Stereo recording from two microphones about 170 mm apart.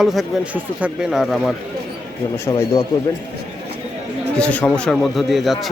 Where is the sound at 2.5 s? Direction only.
20° left (ahead or behind).